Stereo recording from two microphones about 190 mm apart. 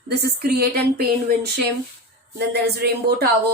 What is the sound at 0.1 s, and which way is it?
Speech, 55° right (ahead or behind).